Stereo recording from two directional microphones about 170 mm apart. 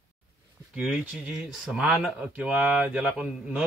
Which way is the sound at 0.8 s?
5° right (ahead or behind).